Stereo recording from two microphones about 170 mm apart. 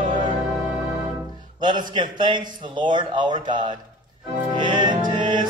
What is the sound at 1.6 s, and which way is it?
A man's voice, 25° right (ahead or behind).